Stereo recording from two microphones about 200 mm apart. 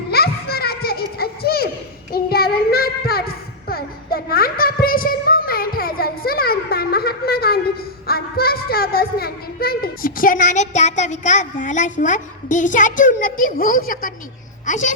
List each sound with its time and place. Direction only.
0.1 s children playing: 50° left (ahead or behind)
2.1 s child singing: 50° left (ahead or behind)
8.0 s a sound: 50° left (ahead or behind)
14.7 s a woman's voice: 40° left (ahead or behind)